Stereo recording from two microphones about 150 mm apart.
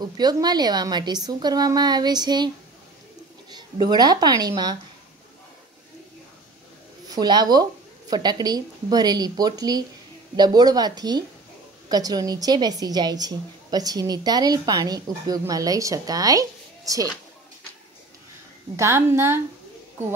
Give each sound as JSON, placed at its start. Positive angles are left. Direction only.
{"t": 0.0, "sound": "a woman's voice", "side_deg": -25}
{"t": 3.5, "sound": "a woman's voice", "side_deg": -30}
{"t": 7.1, "sound": "a woman's voice", "side_deg": -30}
{"t": 18.8, "sound": "a woman's voice", "side_deg": -15}